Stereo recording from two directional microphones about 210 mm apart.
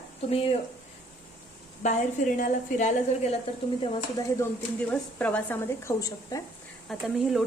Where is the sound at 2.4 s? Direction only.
35° left (ahead or behind).